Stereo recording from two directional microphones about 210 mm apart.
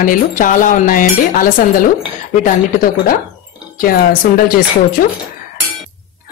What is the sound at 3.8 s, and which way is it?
Speech, 45° left (ahead or behind).